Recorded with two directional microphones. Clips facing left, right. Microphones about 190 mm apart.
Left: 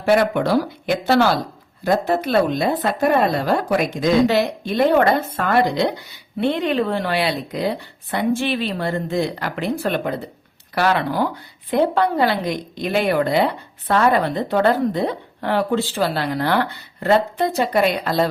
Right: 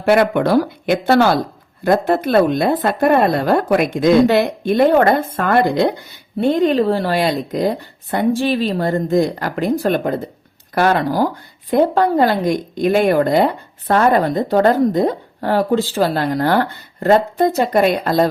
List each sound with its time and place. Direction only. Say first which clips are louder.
0.0 s a woman's voice: right 3 dB; 60° right (ahead or behind)